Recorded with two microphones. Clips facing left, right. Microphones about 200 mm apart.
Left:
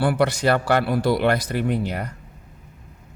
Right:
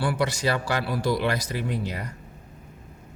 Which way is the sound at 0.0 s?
60° left (ahead or behind).